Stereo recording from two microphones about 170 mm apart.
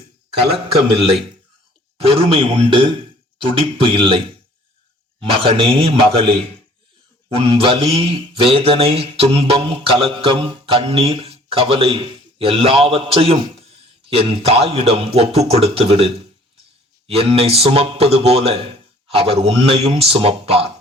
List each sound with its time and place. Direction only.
0.5 s mantra: 35° right (ahead or behind)
2.0 s a man's voice: 35° right (ahead or behind)
5.3 s mantra: 30° right (ahead or behind)
7.3 s mantra: 30° right (ahead or behind)